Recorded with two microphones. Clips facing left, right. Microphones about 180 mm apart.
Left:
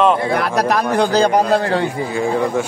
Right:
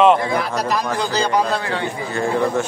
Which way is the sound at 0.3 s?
60° left (ahead or behind).